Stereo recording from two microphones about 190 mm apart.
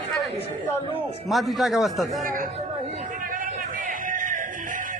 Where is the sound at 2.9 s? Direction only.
45° right (ahead or behind).